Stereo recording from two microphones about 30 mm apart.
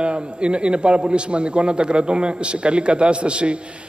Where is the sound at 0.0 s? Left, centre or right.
Right.